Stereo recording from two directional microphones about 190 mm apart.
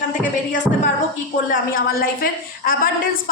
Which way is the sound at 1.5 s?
50° left (ahead or behind).